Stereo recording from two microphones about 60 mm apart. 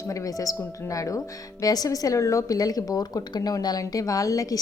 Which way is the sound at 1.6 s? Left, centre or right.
Left.